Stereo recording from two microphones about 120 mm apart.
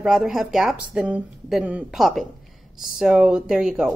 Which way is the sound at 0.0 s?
5° right (ahead or behind).